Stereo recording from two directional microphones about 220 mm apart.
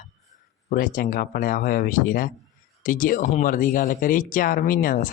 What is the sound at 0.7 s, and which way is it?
Speech, 40° left (ahead or behind).